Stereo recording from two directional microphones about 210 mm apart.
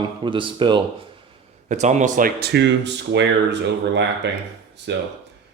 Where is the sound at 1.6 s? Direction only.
35° right (ahead or behind); by 5.0 s 55° right (ahead or behind).